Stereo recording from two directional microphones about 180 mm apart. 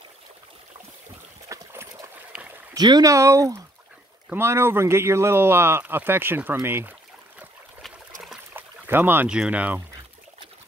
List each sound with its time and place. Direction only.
1.5 s a sound: 15° right (ahead or behind)
4.3 s speech: 15° right (ahead or behind)
8.2 s trickle: 5° right (ahead or behind)